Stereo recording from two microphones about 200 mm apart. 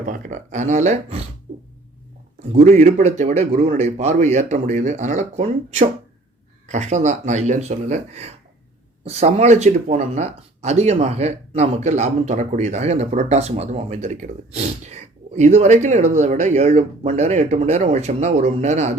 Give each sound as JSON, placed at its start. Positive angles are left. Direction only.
{"t": 0.0, "sound": "speech", "side_deg": -40}
{"t": 2.5, "sound": "speech", "side_deg": -35}